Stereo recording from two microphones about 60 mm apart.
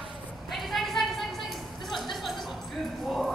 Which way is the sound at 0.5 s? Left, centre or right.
Centre.